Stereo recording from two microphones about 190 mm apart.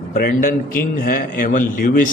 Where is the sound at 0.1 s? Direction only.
45° left (ahead or behind).